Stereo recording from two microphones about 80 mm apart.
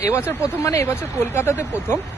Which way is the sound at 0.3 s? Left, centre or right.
Left.